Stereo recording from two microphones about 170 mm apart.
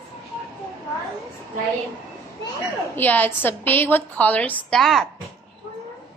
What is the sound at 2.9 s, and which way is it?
A woman's voice, 10° left (ahead or behind).